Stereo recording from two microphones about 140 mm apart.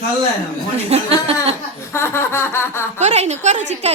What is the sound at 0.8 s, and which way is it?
Speech, 50° right (ahead or behind).